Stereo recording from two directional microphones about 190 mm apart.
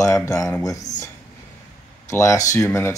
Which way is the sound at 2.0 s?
15° left (ahead or behind).